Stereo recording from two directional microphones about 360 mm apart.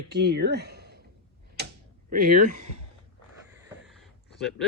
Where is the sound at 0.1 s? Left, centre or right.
Right.